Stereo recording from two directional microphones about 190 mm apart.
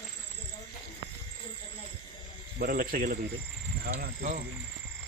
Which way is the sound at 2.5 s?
50° right (ahead or behind).